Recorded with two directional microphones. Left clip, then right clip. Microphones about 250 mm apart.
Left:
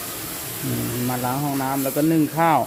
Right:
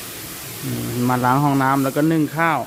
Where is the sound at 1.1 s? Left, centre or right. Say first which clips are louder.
Right 9 dB; right.